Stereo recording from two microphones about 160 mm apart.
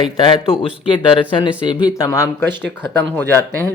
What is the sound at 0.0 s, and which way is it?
Speech, 30° left (ahead or behind).